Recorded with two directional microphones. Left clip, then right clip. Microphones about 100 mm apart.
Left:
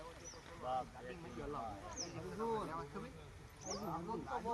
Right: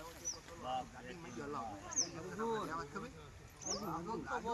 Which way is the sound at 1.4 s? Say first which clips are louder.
Right 2 dB; 15° right (ahead or behind).